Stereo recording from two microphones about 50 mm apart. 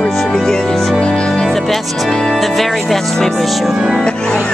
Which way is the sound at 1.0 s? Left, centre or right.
Centre.